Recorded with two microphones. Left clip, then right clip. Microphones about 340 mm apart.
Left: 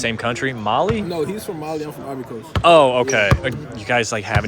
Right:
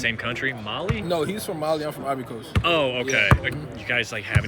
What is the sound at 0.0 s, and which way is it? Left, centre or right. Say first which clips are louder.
Speech: left 4 dB; centre.